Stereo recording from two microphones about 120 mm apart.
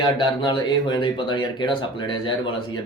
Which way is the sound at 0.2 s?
40° left (ahead or behind).